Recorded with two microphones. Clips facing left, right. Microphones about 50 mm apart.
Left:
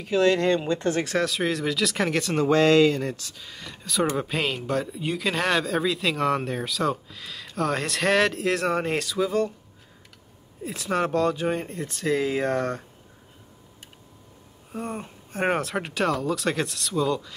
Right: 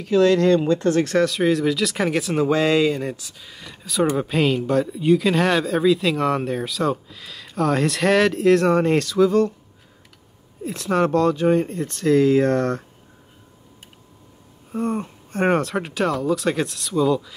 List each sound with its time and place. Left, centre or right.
0.0 s speech: centre
1.0 s speech: centre
10.6 s speech: centre
14.7 s speech: centre